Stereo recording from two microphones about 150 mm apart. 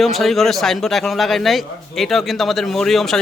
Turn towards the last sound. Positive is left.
turn(degrees=0)  # may be behind; listen again after turning